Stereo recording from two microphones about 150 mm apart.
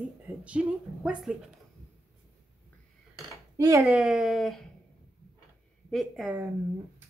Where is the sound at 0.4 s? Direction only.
10° right (ahead or behind).